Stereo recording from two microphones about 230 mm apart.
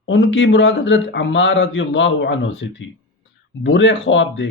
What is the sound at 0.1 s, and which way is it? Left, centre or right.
A man's voice, left.